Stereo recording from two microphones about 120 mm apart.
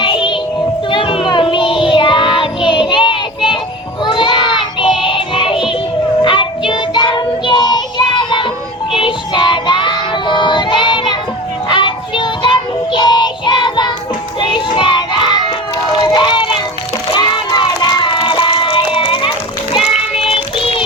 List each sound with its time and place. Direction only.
0.0 s child singing: 45° left (ahead or behind)
11.7 s music: 40° left (ahead or behind)
14.4 s child singing: 40° left (ahead or behind)
15.9 s run: 40° left (ahead or behind)
17.1 s a sound: 40° left (ahead or behind)
18.9 s music: 45° left (ahead or behind)
19.8 s child singing: 5° right (ahead or behind)
20.2 s a sound: 45° left (ahead or behind)